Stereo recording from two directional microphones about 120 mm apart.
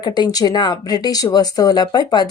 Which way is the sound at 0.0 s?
35° left (ahead or behind).